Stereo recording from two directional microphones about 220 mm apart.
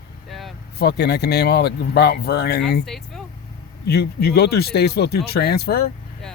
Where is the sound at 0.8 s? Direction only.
45° left (ahead or behind).